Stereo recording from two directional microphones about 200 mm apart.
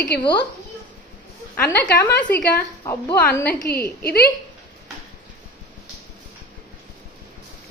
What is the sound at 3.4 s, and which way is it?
Speech, 50° left (ahead or behind).